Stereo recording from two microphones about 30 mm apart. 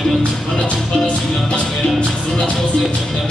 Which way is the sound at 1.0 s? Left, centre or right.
Left.